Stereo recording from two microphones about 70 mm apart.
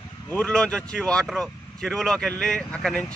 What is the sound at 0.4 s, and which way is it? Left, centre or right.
Speech, centre.